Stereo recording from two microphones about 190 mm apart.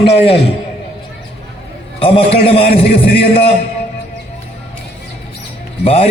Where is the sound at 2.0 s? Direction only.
30° left (ahead or behind).